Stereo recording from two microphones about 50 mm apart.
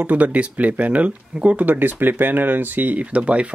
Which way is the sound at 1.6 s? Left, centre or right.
Right.